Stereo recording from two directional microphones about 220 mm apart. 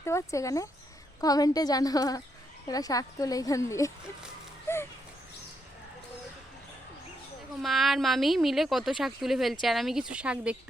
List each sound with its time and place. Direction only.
0.0 s a woman's voice: 10° left (ahead or behind)
7.6 s speech: centre (ahead or behind)